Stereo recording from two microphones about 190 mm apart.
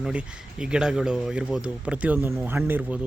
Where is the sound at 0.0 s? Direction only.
5° right (ahead or behind).